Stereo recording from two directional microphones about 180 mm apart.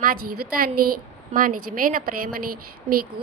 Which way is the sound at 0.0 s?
55° right (ahead or behind).